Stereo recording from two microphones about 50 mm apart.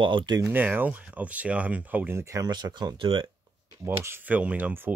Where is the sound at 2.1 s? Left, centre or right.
Right.